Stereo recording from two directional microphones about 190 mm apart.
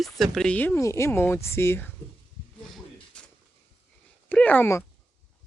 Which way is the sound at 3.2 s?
5° left (ahead or behind).